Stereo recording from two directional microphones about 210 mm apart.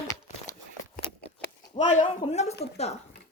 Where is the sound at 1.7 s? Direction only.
35° left (ahead or behind).